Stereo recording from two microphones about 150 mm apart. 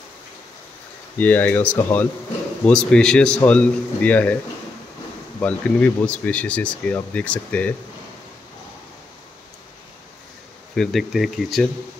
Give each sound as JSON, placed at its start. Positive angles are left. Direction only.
{"t": 1.1, "sound": "speech", "side_deg": 10}
{"t": 2.6, "sound": "speech", "side_deg": 5}
{"t": 5.4, "sound": "speech", "side_deg": 10}
{"t": 10.8, "sound": "speech", "side_deg": 0}